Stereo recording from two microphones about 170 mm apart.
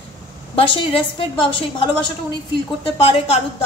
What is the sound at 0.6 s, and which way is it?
A woman's voice, 30° left (ahead or behind).